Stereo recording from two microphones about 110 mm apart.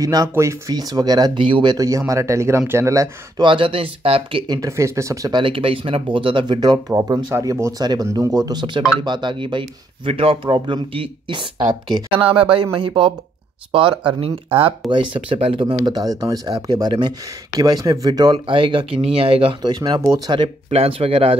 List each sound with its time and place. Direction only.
0.0 s speech: 35° right (ahead or behind)
3.4 s speech: 55° right (ahead or behind)
4.6 s speech: 30° right (ahead or behind)
5.3 s speech: 55° right (ahead or behind); by 18.4 s 35° right (ahead or behind)
18.5 s speech: 50° right (ahead or behind)
19.6 s speech: 40° right (ahead or behind)
20.7 s speech: 60° right (ahead or behind)